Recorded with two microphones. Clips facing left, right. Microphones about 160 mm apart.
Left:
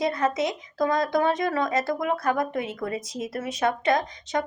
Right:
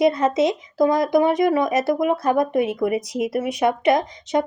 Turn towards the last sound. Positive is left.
turn(degrees=-20)  # may be behind; listen again after turning